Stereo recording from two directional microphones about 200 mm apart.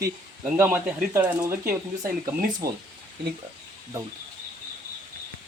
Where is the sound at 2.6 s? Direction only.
50° right (ahead or behind).